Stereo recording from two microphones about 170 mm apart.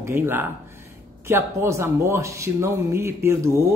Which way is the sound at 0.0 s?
15° right (ahead or behind).